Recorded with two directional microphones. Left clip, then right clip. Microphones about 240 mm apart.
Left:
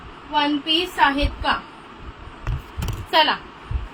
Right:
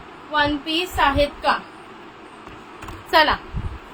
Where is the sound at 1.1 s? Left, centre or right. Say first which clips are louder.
Right 3 dB; right.